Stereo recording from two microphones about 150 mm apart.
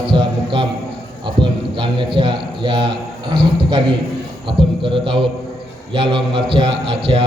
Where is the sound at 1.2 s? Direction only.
35° right (ahead or behind).